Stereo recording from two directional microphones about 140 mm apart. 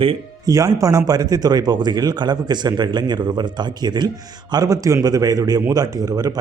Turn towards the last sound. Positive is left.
turn(degrees=-25)  # may be behind; listen again after turning